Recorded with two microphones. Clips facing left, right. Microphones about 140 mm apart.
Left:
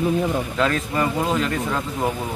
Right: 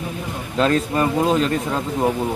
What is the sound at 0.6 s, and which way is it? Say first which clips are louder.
Speech: right 6 dB; 30° right (ahead or behind).